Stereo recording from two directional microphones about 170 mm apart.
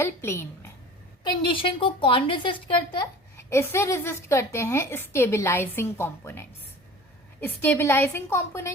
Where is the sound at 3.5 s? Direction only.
15° left (ahead or behind).